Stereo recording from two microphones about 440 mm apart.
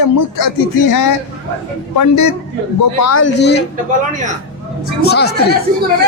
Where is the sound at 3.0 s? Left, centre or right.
Left.